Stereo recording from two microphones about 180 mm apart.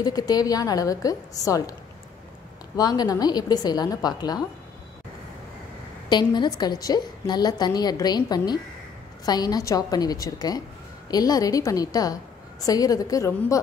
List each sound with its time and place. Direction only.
0.0 s a woman's voice: 20° left (ahead or behind)
6.0 s a woman's voice: 25° left (ahead or behind)